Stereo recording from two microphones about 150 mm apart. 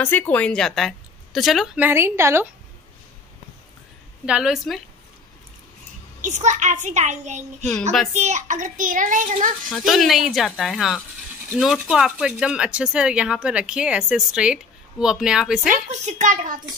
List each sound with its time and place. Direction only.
0.0 s speech: 10° left (ahead or behind)
1.8 s a woman's voice: 15° right (ahead or behind)
4.3 s speech: 5° right (ahead or behind)
6.2 s a child's voice: 50° right (ahead or behind)
9.7 s speech: centre (ahead or behind)
15.9 s a child's voice: 50° right (ahead or behind)